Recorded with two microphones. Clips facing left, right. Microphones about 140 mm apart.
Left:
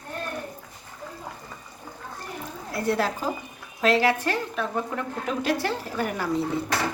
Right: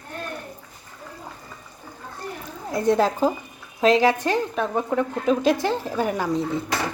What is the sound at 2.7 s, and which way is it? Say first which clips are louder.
Speech: right 6 dB; 20° right (ahead or behind).